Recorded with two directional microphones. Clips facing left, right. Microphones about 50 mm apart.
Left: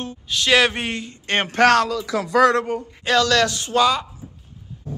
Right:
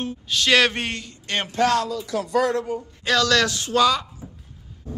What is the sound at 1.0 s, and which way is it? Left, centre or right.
Speech, left.